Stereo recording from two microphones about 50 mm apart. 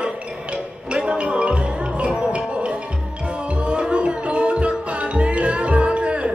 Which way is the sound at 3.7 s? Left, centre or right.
Right.